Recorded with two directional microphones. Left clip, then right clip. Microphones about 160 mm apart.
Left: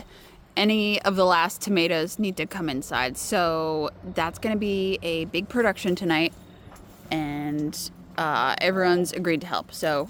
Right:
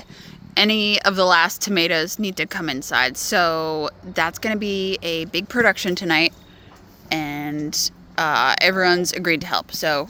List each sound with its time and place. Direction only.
0.5 s speech: 10° left (ahead or behind)